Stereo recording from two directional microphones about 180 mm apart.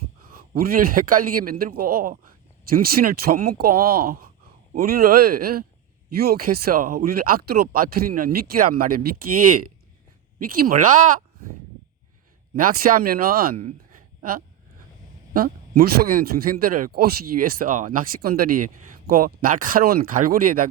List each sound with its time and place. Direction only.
0.2 s a man's voice: 55° right (ahead or behind)
12.5 s a man's voice: 50° right (ahead or behind)